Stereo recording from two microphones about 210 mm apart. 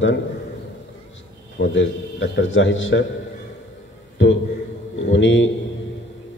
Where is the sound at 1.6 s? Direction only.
55° left (ahead or behind).